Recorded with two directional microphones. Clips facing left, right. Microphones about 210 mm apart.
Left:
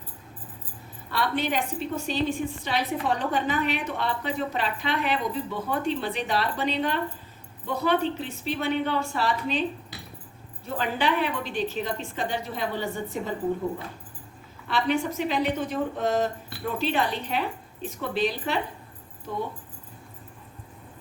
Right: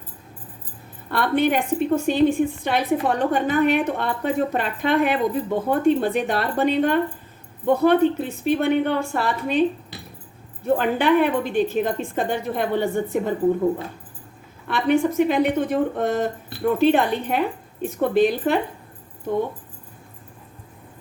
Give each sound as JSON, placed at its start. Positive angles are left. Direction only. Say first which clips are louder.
{"t": 1.1, "sound": "a woman's voice", "louder": "right 7 dB", "side_deg": -55}
{"t": 10.7, "sound": "a woman's voice", "louder": "right 8 dB", "side_deg": -55}
{"t": 14.7, "sound": "a woman's voice", "louder": "right 6 dB", "side_deg": -55}